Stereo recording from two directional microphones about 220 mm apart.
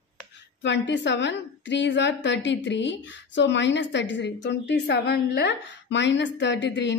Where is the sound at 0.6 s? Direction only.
55° left (ahead or behind).